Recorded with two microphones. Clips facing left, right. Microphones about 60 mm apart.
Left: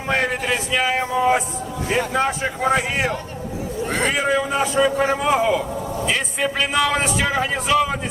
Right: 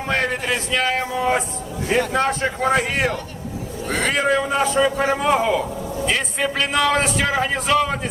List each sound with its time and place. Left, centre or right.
0.1 s a man's voice: centre
3.8 s speech: left
4.1 s a man's voice: centre